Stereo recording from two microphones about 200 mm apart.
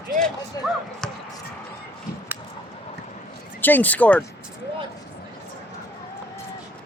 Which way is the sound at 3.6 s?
10° left (ahead or behind).